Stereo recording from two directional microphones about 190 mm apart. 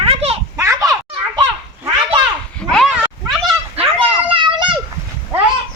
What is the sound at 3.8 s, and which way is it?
Children playing, 30° right (ahead or behind).